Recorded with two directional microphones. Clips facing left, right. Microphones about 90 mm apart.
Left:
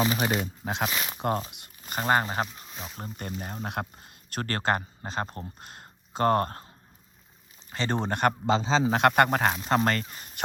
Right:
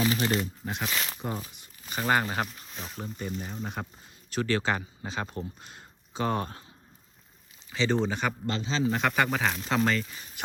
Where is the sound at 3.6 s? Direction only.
60° left (ahead or behind).